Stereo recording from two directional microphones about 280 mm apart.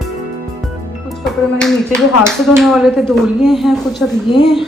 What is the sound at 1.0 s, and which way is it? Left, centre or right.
A woman's voice, centre.